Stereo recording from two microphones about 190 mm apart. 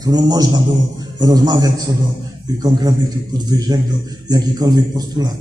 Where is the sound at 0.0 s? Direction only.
20° right (ahead or behind).